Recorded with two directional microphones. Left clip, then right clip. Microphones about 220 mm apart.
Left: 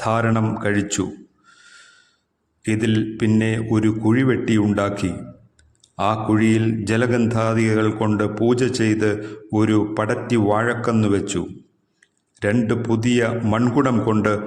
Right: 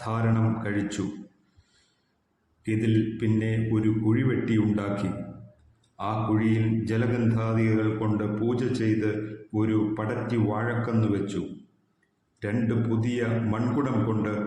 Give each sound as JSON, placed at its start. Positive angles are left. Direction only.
{"t": 0.0, "sound": "a man's voice", "side_deg": 45}
{"t": 2.6, "sound": "a man's voice", "side_deg": 45}
{"t": 12.4, "sound": "a man's voice", "side_deg": 45}